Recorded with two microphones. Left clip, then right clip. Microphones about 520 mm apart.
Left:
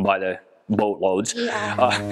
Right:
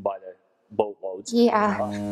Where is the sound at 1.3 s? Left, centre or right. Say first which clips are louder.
Right 5 dB; right.